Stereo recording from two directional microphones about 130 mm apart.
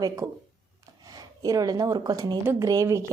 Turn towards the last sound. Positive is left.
turn(degrees=-20)  # may be behind; listen again after turning